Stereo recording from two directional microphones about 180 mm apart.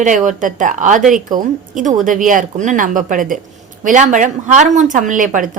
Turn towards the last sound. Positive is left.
turn(degrees=-45)  # may be behind; listen again after turning